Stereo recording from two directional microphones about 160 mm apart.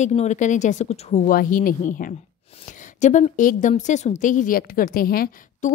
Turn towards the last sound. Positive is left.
turn(degrees=65)  # may be behind; listen again after turning